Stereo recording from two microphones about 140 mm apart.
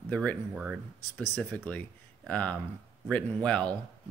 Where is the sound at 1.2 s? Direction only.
10° left (ahead or behind).